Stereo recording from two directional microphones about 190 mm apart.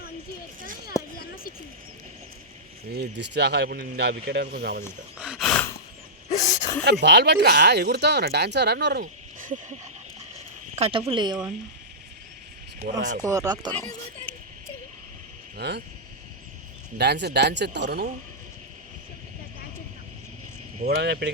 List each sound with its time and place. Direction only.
0.9 s a sound: 15° left (ahead or behind)
2.9 s speech: 60° right (ahead or behind)
5.2 s gasp: centre (ahead or behind)
6.2 s a sound: 40° left (ahead or behind)
7.0 s speech: 65° right (ahead or behind); by 9.7 s 45° right (ahead or behind)
10.8 s speech: 30° right (ahead or behind)
12.8 s speech: 40° right (ahead or behind)
13.2 s speech: 20° right (ahead or behind)
15.5 s speech: 60° right (ahead or behind)
17.0 s speech: 60° right (ahead or behind)
20.8 s speech: 55° right (ahead or behind)